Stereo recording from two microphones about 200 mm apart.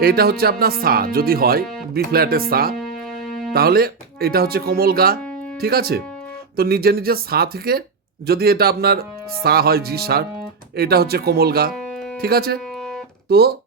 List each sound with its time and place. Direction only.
0.0 s speech: 50° right (ahead or behind)
2.7 s music: centre (ahead or behind)
3.5 s speech: 50° right (ahead or behind)
11.7 s music: centre (ahead or behind)
12.2 s speech: 50° right (ahead or behind)